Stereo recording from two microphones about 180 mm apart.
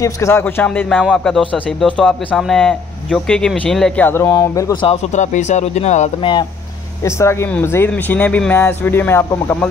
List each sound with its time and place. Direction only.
0.0 s a man's voice: 15° left (ahead or behind)
4.8 s speech: 40° left (ahead or behind)
7.1 s speech: 15° left (ahead or behind)